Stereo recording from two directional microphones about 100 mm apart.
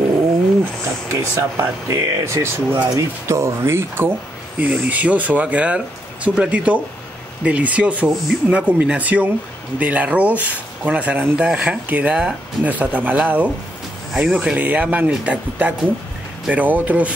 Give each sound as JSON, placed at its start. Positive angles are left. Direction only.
{"t": 1.1, "sound": "speech", "side_deg": -30}